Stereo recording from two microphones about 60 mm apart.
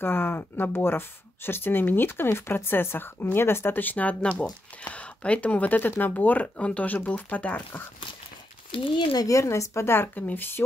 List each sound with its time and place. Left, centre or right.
0.0 s speech: left
9.2 s speech: left
9.9 s speech: left